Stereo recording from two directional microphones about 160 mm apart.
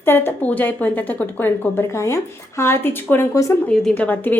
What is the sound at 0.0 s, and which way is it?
A woman's voice, 15° left (ahead or behind).